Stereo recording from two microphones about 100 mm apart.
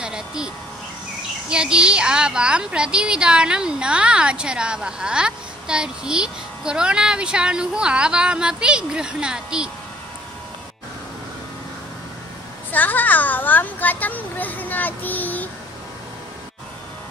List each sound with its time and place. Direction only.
0.0 s a sound: 5° right (ahead or behind)
1.5 s a woman's voice: 10° right (ahead or behind)
12.7 s a child's voice: 15° left (ahead or behind)